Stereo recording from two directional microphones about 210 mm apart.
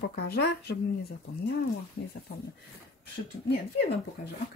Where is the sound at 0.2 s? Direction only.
50° left (ahead or behind).